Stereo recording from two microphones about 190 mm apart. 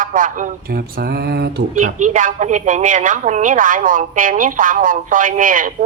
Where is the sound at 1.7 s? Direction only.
40° right (ahead or behind).